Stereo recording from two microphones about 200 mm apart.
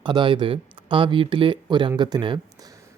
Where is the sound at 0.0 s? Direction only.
25° right (ahead or behind).